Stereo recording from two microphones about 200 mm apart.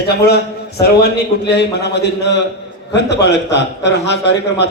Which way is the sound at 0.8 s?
55° left (ahead or behind).